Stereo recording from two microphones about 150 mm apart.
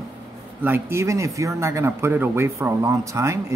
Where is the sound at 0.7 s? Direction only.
15° right (ahead or behind).